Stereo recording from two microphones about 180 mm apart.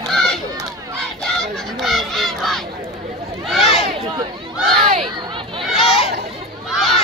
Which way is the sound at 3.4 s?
Centre (ahead or behind).